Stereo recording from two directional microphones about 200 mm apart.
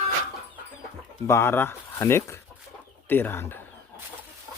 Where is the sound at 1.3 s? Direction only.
10° left (ahead or behind).